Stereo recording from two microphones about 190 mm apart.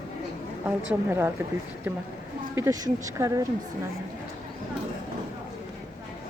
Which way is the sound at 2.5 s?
15° right (ahead or behind).